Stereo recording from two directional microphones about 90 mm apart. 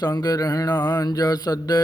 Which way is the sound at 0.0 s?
45° left (ahead or behind).